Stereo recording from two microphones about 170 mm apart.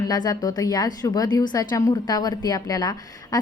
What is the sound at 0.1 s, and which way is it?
A woman's voice, 20° left (ahead or behind).